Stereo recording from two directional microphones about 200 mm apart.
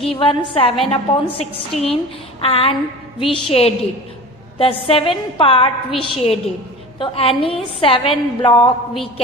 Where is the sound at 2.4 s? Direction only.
30° left (ahead or behind).